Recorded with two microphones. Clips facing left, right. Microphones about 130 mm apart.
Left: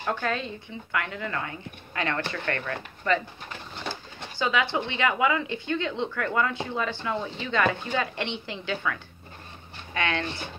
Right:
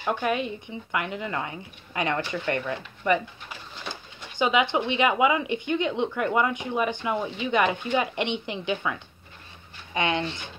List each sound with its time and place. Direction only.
0.0 s speech: 15° right (ahead or behind)
3.1 s pigeon: 15° right (ahead or behind)
4.4 s speech: 20° right (ahead or behind)
9.9 s speech: 20° right (ahead or behind)